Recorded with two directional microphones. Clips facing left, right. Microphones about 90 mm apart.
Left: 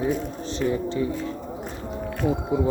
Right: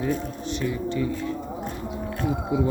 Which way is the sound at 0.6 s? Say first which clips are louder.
Left 3 dB; 30° left (ahead or behind).